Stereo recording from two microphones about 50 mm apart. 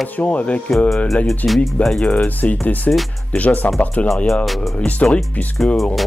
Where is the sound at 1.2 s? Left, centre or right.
Centre.